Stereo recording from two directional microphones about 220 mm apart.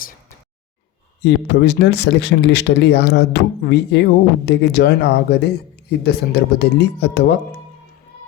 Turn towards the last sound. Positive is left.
turn(degrees=50)  # may be behind; listen again after turning